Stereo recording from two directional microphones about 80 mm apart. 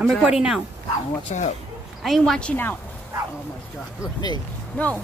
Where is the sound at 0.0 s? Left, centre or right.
Centre.